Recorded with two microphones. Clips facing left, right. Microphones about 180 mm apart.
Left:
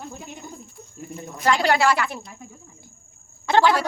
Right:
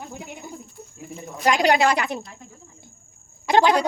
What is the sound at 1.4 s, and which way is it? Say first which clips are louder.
Speech: right 1 dB; 15° right (ahead or behind).